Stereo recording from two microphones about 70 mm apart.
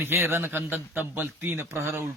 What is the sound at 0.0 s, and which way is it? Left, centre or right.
A man's voice, right.